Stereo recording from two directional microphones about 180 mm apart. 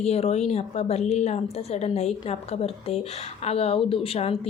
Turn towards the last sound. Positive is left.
turn(degrees=35)  # may be behind; listen again after turning